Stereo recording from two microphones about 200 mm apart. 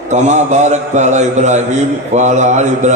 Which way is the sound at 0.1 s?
35° right (ahead or behind).